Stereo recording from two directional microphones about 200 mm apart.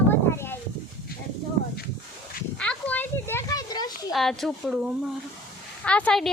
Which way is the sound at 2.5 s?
5° left (ahead or behind).